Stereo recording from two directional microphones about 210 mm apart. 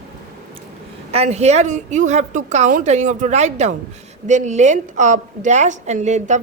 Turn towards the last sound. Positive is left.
turn(degrees=-35)  # may be behind; listen again after turning